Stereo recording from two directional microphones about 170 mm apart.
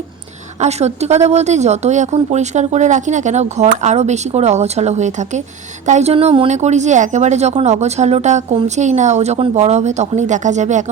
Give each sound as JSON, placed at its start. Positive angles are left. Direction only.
{"t": 0.6, "sound": "a woman's voice", "side_deg": -40}